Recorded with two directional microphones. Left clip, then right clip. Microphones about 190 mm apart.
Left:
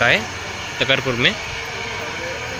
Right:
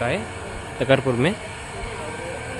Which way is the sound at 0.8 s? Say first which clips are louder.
Left 2 dB; 25° right (ahead or behind).